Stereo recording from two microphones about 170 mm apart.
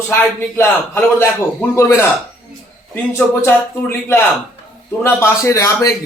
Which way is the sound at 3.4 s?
15° left (ahead or behind).